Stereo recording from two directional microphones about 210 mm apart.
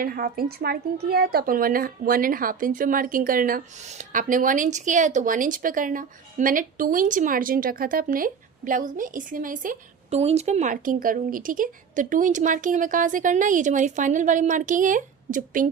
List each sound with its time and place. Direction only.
0.0 s a woman's voice: 45° right (ahead or behind)